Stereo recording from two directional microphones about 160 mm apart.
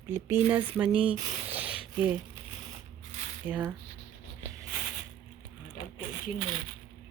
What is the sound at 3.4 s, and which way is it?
Speech, 10° right (ahead or behind).